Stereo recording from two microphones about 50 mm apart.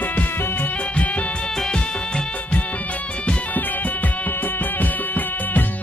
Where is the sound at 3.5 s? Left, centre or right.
Left.